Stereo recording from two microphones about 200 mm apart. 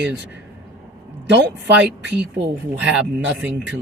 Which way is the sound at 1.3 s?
60° right (ahead or behind).